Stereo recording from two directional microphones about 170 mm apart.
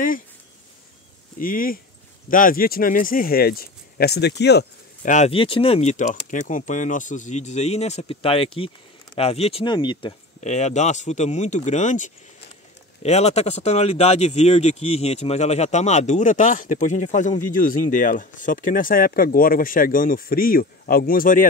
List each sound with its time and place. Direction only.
1.4 s speech: 55° left (ahead or behind); by 4.6 s 80° left
5.0 s speech: 45° left (ahead or behind)
5.3 s speech: 30° left (ahead or behind)
10.4 s speech: 40° left (ahead or behind)